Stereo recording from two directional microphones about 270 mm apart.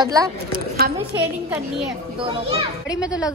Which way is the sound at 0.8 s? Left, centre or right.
Right.